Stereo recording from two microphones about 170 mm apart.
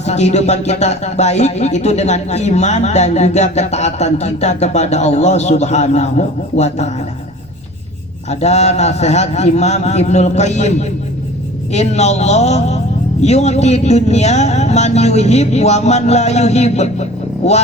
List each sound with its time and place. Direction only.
0.0 s speech: 40° left (ahead or behind)
8.3 s speech: 40° left (ahead or behind)